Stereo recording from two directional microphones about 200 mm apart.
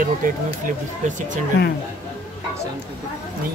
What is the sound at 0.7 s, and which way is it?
Speech, 40° right (ahead or behind).